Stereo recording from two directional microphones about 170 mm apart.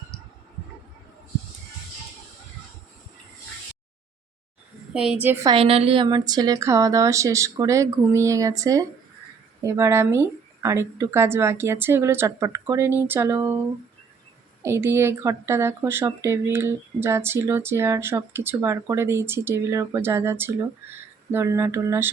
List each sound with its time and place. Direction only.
4.9 s speech: 5° right (ahead or behind)
5.5 s a woman's voice: 35° right (ahead or behind); by 13.6 s 15° right (ahead or behind)
14.6 s speech: 15° right (ahead or behind)